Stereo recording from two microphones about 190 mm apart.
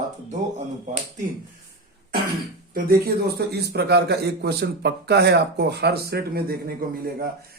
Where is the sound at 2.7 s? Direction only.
55° right (ahead or behind).